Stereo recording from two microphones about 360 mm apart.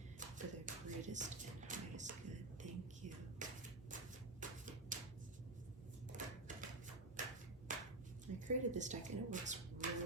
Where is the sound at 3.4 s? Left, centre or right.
Right.